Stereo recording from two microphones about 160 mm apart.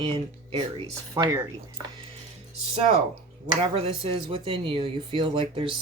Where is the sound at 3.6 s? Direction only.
35° right (ahead or behind).